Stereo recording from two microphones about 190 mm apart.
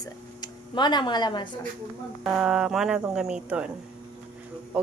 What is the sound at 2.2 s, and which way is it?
Speech, 5° right (ahead or behind).